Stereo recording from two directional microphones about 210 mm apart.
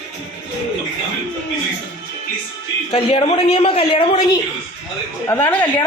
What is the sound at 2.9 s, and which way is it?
A man's voice, 30° left (ahead or behind).